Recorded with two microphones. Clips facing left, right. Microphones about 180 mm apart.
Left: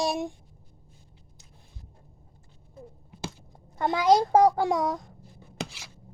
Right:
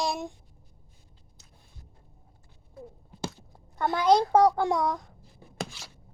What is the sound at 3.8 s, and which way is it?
A child's voice, 15° left (ahead or behind).